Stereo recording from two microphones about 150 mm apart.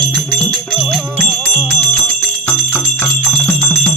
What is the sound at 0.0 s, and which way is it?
Music, 5° left (ahead or behind).